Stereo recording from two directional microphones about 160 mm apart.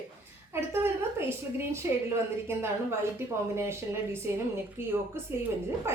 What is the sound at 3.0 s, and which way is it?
Speech, 15° right (ahead or behind).